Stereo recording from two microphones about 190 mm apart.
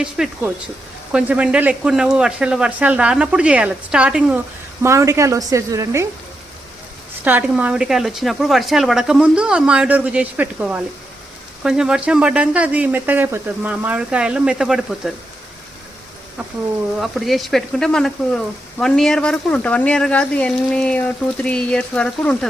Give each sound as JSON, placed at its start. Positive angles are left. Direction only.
{"t": 0.0, "sound": "speech", "side_deg": -5}
{"t": 7.3, "sound": "speech", "side_deg": -10}
{"t": 17.0, "sound": "speech", "side_deg": 0}